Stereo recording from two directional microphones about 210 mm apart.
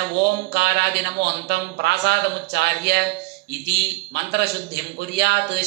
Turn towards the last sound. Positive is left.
turn(degrees=-55)  # may be behind; listen again after turning